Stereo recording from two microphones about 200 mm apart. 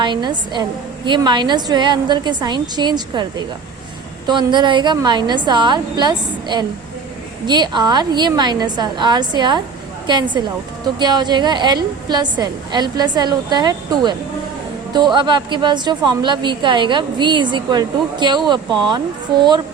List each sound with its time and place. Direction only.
0.0 s a woman's voice: 20° right (ahead or behind)